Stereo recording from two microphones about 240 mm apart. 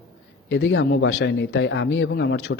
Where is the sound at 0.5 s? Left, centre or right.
Left.